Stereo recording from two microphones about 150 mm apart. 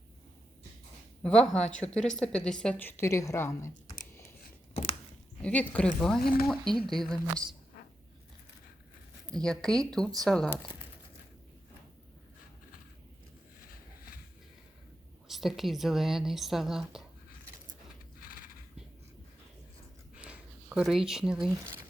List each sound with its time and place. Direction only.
1.2 s a woman's voice: 5° left (ahead or behind)
5.4 s a woman's voice: 10° left (ahead or behind)
6.2 s speech: 90° left
6.8 s a woman's voice: centre (ahead or behind)
9.3 s a woman's voice: 5° left (ahead or behind)
15.3 s a woman's voice: centre (ahead or behind)
18.2 s neigh: 75° left (ahead or behind)
20.2 s a sound: 5° right (ahead or behind)